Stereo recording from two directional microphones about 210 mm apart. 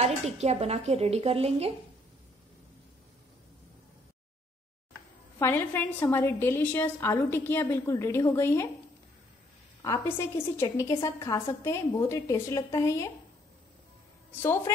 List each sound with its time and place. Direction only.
0.0 s a woman's voice: 30° right (ahead or behind)
5.4 s a woman's voice: 10° left (ahead or behind)
9.8 s a woman's voice: 15° left (ahead or behind)
14.4 s a woman's voice: 10° left (ahead or behind)